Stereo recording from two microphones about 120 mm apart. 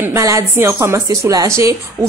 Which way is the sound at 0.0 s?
25° right (ahead or behind).